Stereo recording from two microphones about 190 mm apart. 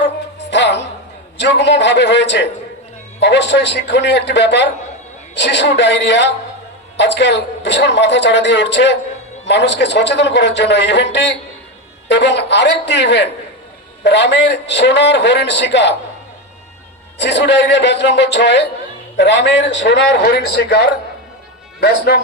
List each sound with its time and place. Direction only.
0.5 s a sound: 70° left (ahead or behind)
1.4 s a man's voice: 70° left (ahead or behind)
17.2 s a man's voice: 70° left (ahead or behind)